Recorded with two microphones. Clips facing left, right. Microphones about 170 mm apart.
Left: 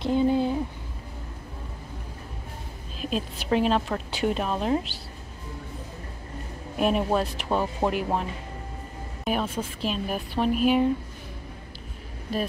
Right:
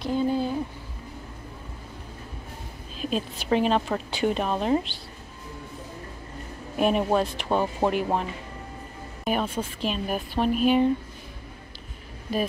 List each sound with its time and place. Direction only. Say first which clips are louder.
0.0 s a sound: left 2 dB; 20° left (ahead or behind)
3.0 s a woman's voice: right 1 dB; centre (ahead or behind)
6.8 s a woman's voice: right 1 dB; centre (ahead or behind)